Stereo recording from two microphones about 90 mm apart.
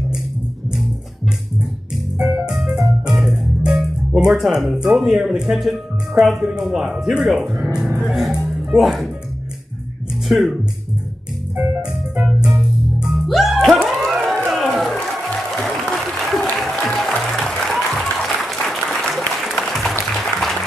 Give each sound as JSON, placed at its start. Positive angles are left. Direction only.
{"t": 2.4, "sound": "music", "side_deg": -5}
{"t": 10.2, "sound": "speech", "side_deg": 0}
{"t": 11.5, "sound": "music", "side_deg": -20}
{"t": 12.4, "sound": "music", "side_deg": -5}
{"t": 13.8, "sound": "a sound", "side_deg": 0}
{"t": 14.3, "sound": "applause", "side_deg": 5}